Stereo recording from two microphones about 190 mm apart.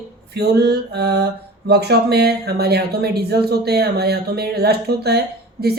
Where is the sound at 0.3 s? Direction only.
60° right (ahead or behind).